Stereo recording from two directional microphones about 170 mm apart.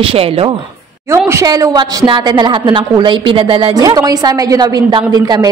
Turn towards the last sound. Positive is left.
turn(degrees=-25)  # may be behind; listen again after turning